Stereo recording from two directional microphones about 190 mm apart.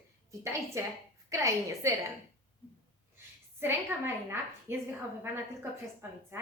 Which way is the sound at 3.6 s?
10° right (ahead or behind).